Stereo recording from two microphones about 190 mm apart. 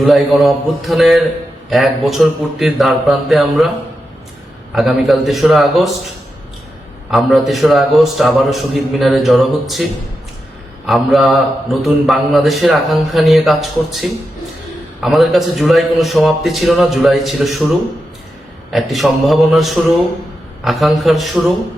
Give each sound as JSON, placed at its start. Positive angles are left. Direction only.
{"t": 0.0, "sound": "a man's voice", "side_deg": 0}
{"t": 4.7, "sound": "a man's voice", "side_deg": 0}
{"t": 7.1, "sound": "a man's voice", "side_deg": 0}
{"t": 10.8, "sound": "a man's voice", "side_deg": 0}
{"t": 15.0, "sound": "a man's voice", "side_deg": 0}
{"t": 18.7, "sound": "a man's voice", "side_deg": 0}